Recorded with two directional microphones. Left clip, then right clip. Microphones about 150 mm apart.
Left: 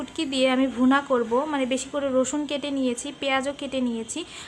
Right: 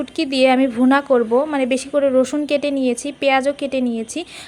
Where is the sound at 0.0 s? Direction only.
35° right (ahead or behind).